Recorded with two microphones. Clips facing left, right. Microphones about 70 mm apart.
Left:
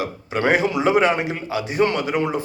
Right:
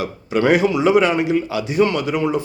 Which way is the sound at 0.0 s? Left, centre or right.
Left.